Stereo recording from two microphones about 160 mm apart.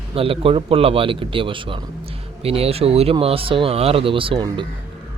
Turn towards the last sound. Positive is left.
turn(degrees=-30)  # may be behind; listen again after turning